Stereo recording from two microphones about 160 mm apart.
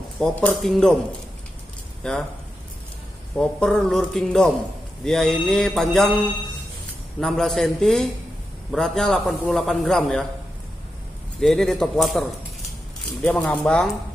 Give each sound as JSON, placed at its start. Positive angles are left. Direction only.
{"t": 0.2, "sound": "a man's voice", "side_deg": 5}
{"t": 2.0, "sound": "a man's voice", "side_deg": 5}
{"t": 3.3, "sound": "a man's voice", "side_deg": 5}
{"t": 11.4, "sound": "a man's voice", "side_deg": 0}